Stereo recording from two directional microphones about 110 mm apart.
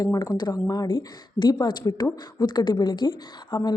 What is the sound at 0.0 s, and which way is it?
A woman's voice, 35° left (ahead or behind).